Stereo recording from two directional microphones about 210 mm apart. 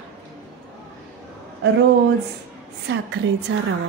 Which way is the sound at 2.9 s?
55° right (ahead or behind).